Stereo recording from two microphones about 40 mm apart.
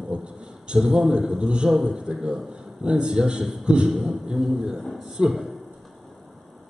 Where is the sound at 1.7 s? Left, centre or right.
Centre.